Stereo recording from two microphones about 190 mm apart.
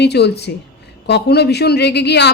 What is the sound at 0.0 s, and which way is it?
A woman's voice, 60° left (ahead or behind).